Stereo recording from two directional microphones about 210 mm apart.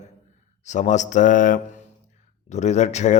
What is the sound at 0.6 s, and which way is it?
Speech, 35° left (ahead or behind).